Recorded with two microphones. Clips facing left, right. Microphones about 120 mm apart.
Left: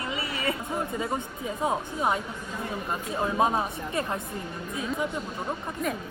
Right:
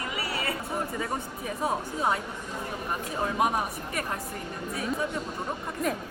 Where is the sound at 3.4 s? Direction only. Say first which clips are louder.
Left 2 dB; 25° left (ahead or behind).